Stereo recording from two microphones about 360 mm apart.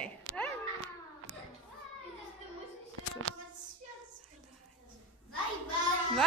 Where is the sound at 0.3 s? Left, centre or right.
Right.